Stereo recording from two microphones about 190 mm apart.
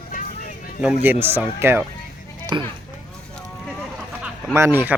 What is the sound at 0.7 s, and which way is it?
Speech, 10° right (ahead or behind).